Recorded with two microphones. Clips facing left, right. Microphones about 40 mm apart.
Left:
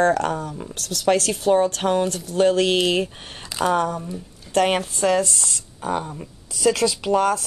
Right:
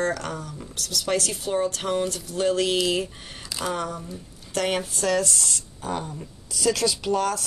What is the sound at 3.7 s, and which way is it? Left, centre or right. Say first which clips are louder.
Speech: left 8 dB; left.